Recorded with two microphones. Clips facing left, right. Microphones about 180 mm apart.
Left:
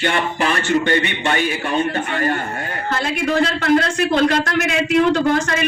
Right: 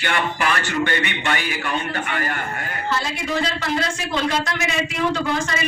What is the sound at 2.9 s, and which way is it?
A man's voice, 55° left (ahead or behind).